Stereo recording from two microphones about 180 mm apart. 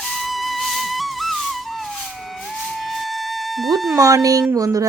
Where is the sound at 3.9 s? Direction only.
20° right (ahead or behind).